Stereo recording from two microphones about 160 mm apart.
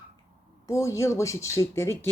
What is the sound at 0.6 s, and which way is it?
Speech, 20° left (ahead or behind).